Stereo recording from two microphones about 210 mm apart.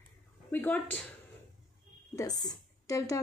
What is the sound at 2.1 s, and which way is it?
A woman's voice, 15° left (ahead or behind).